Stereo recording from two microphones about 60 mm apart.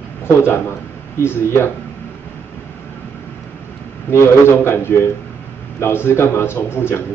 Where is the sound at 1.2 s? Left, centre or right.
Left.